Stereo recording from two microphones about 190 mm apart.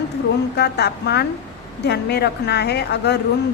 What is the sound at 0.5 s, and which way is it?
A woman's voice, 60° left (ahead or behind).